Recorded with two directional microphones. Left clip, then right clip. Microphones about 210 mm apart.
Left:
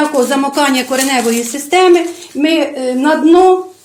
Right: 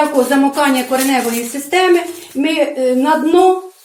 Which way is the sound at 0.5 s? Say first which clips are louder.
Left 1 dB; 50° left (ahead or behind).